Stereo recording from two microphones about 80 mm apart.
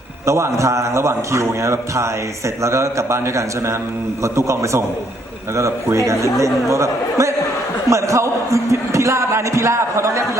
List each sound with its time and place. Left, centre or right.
0.3 s speech: right